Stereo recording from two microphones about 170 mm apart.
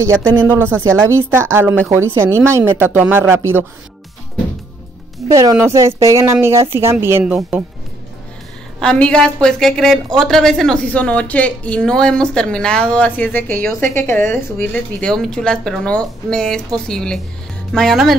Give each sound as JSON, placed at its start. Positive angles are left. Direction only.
{"t": 0.5, "sound": "speech", "side_deg": -10}
{"t": 5.3, "sound": "speech", "side_deg": -20}
{"t": 8.7, "sound": "a woman's voice", "side_deg": 5}